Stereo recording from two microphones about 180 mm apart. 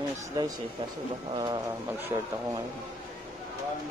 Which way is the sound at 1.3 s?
30° right (ahead or behind).